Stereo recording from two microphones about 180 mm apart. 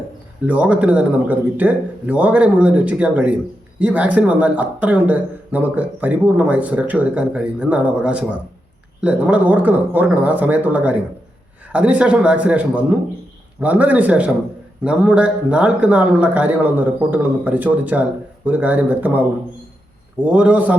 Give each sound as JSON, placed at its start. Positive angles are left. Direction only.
{"t": 0.4, "sound": "speech", "side_deg": -10}
{"t": 20.2, "sound": "speech", "side_deg": -5}